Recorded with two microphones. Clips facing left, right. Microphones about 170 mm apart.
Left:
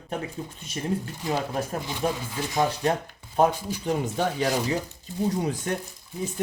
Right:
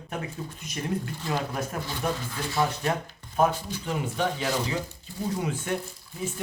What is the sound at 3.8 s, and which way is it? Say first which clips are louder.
Speech: left 3 dB; 40° left (ahead or behind).